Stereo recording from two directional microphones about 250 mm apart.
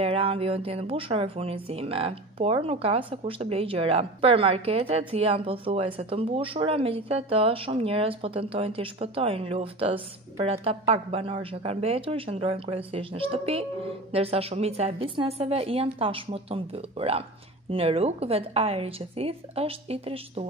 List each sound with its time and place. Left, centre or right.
0.0 s speech: right